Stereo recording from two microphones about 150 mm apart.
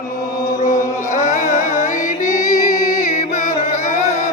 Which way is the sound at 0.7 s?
55° left (ahead or behind).